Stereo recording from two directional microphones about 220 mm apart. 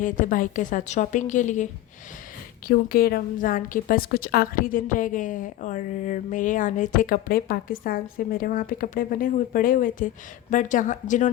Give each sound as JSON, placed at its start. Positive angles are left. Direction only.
{"t": 0.0, "sound": "a woman's voice", "side_deg": 35}
{"t": 2.6, "sound": "a woman's voice", "side_deg": 40}